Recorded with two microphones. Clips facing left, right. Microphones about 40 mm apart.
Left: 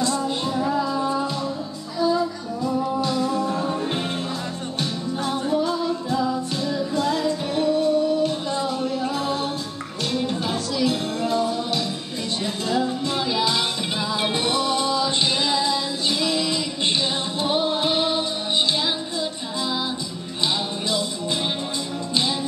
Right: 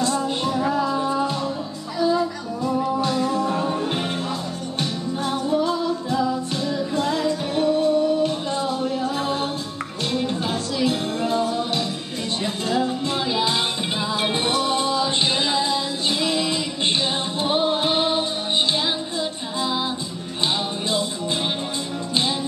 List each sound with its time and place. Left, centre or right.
0.2 s music: centre
2.0 s music: centre
5.6 s music: right
10.1 s music: centre
12.6 s music: centre